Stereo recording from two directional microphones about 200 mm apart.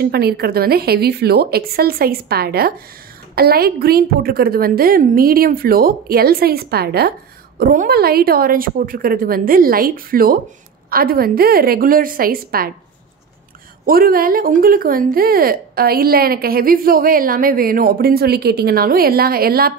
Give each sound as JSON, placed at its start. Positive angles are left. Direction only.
{"t": 0.0, "sound": "a woman's voice", "side_deg": -50}
{"t": 13.8, "sound": "a woman's voice", "side_deg": -45}